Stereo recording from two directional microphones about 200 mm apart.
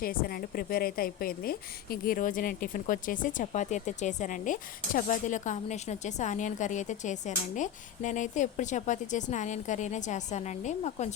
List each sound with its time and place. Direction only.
0.0 s a woman's voice: 45° left (ahead or behind)